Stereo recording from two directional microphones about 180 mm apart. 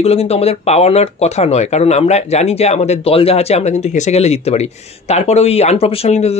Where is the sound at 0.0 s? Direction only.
35° left (ahead or behind).